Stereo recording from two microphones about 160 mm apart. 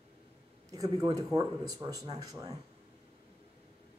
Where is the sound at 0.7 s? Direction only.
20° right (ahead or behind).